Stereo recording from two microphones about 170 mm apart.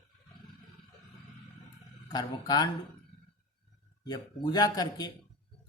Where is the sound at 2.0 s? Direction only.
25° left (ahead or behind).